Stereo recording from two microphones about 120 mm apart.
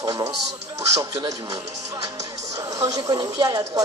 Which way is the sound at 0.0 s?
35° right (ahead or behind).